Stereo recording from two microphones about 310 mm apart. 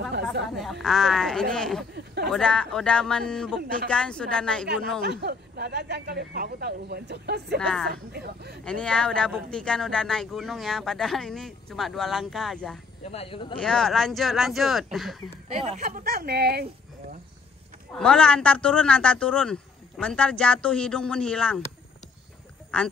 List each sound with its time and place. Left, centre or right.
0.1 s chatter: right
0.8 s speech: centre
5.0 s speech: right
7.5 s speech: centre
7.9 s speech: right
8.6 s speech: centre
13.0 s speech: centre
13.6 s speech: centre
15.4 s speech: centre
17.9 s speech: centre
22.7 s speech: centre